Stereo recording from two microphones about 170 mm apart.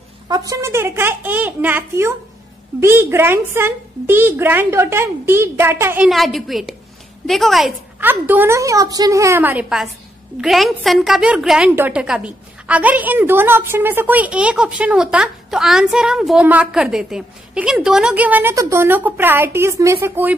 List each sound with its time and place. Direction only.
0.3 s a woman's voice: 20° right (ahead or behind)
6.0 s a woman's voice: centre (ahead or behind)
8.0 s a woman's voice: 10° right (ahead or behind)